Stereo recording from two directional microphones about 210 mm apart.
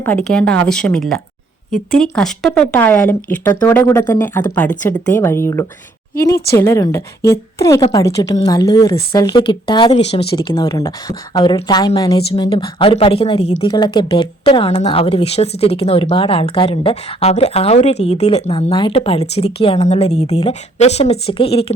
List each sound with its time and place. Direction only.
0.0 s speech: 10° left (ahead or behind)
2.0 s speech: 5° left (ahead or behind); by 21.7 s 25° left (ahead or behind)